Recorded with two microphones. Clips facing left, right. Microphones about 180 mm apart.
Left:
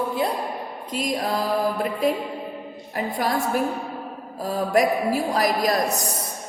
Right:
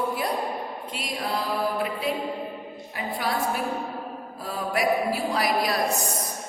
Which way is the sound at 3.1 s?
45° left (ahead or behind).